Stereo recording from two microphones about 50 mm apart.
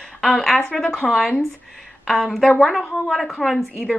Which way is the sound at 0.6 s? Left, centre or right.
Centre.